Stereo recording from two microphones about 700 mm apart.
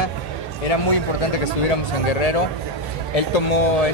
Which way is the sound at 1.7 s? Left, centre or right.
Left.